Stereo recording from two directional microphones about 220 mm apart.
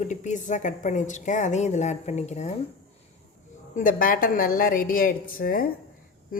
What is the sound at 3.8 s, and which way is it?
A woman's voice, 40° left (ahead or behind).